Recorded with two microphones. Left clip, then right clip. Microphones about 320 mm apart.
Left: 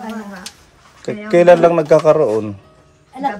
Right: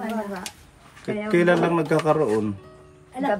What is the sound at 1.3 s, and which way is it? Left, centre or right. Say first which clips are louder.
Speech: left 11 dB; centre.